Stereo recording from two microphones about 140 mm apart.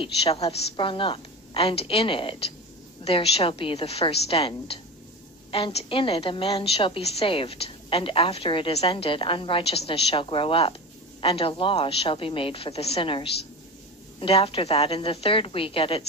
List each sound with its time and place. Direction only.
0.0 s a woman's voice: 45° left (ahead or behind)